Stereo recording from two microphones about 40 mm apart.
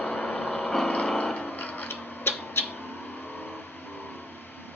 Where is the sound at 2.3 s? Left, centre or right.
Left.